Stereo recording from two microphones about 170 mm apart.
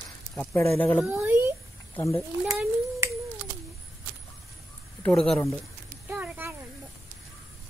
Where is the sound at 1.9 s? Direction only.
10° left (ahead or behind).